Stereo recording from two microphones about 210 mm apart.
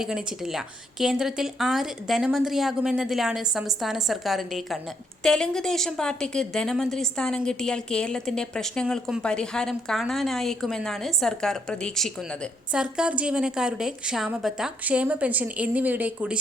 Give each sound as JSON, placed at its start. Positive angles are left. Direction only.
{"t": 0.0, "sound": "a woman's voice", "side_deg": 0}